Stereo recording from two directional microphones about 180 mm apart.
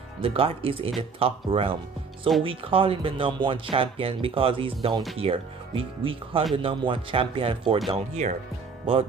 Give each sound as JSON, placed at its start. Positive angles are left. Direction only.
{"t": 0.2, "sound": "speech", "side_deg": -30}